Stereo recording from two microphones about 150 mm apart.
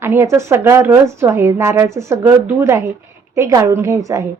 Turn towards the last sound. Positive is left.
turn(degrees=-20)  # may be behind; listen again after turning